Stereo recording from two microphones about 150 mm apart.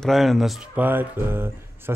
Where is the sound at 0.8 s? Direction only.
15° right (ahead or behind).